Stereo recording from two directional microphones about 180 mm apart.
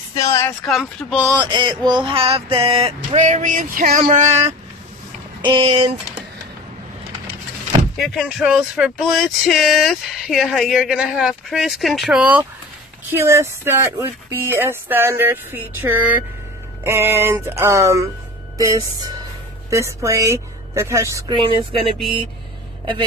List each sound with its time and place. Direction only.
0.1 s speech: 15° left (ahead or behind)
0.7 s speech: centre (ahead or behind)
1.4 s speech: 25° right (ahead or behind)
1.9 s a sound: 25° right (ahead or behind)
5.4 s speech: 25° right (ahead or behind)
8.0 s speech: centre (ahead or behind); by 21.4 s 15° right (ahead or behind)
21.4 s speech: 30° right (ahead or behind)